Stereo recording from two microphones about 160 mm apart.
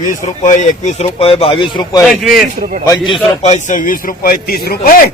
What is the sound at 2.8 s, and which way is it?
Speech, 25° left (ahead or behind).